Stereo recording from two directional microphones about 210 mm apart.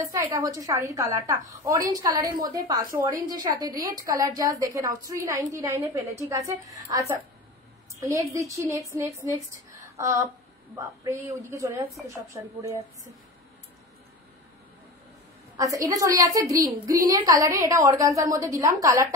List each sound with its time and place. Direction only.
0.0 s a woman's voice: 15° right (ahead or behind)
15.5 s a woman's voice: 15° right (ahead or behind)